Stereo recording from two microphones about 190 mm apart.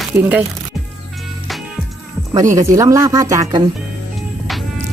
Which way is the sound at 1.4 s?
Centre (ahead or behind).